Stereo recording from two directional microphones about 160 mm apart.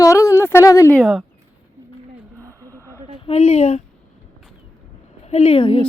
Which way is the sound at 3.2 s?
40° left (ahead or behind).